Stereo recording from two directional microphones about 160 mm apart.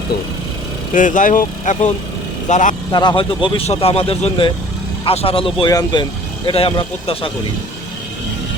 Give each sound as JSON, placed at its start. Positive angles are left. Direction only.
{"t": 0.9, "sound": "speech", "side_deg": 55}
{"t": 2.9, "sound": "speech", "side_deg": 25}